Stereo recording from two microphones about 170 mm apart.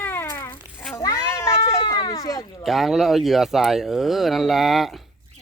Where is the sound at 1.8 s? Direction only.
25° left (ahead or behind).